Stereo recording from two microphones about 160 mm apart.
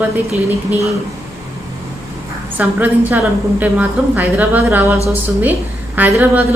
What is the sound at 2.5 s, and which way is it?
A woman's voice, 10° right (ahead or behind).